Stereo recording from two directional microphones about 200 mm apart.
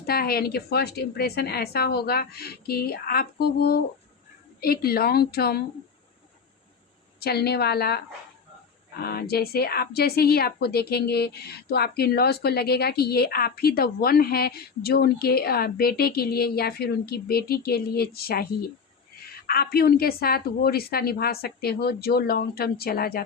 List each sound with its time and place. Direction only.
0.0 s a woman's voice: 50° left (ahead or behind)
7.2 s a woman's voice: 50° left (ahead or behind)
19.5 s a woman's voice: 50° left (ahead or behind)